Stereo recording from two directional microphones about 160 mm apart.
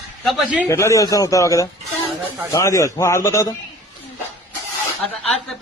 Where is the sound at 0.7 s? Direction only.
20° left (ahead or behind).